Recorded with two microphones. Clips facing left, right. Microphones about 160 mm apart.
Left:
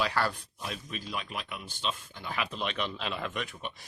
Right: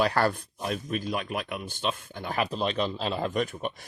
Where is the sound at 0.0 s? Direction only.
50° right (ahead or behind).